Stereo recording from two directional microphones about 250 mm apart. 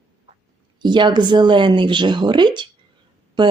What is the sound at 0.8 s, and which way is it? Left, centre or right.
A woman's voice, centre.